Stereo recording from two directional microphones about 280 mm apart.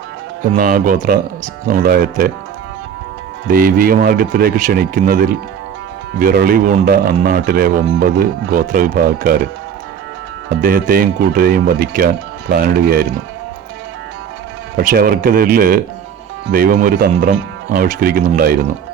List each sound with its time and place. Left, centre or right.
0.5 s speech: right
3.4 s speech: right
10.5 s speech: right
14.8 s speech: right